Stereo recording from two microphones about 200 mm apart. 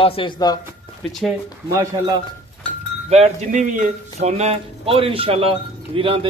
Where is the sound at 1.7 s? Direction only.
20° right (ahead or behind).